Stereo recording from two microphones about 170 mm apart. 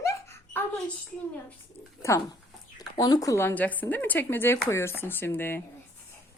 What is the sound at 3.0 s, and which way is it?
Speech, 20° left (ahead or behind).